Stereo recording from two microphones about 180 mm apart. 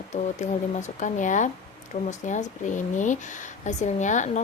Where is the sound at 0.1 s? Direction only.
40° left (ahead or behind).